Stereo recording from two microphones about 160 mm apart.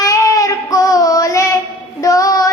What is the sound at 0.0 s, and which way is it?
Child singing, 20° left (ahead or behind).